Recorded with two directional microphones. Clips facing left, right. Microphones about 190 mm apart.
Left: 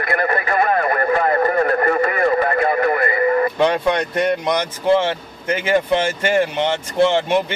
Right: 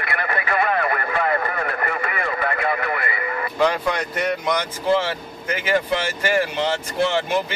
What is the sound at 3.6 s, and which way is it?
Speech, 25° left (ahead or behind).